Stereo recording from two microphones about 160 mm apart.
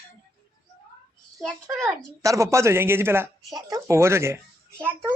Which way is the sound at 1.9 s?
20° right (ahead or behind).